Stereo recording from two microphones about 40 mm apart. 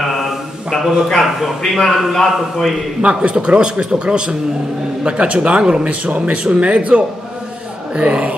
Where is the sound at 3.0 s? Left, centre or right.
Right.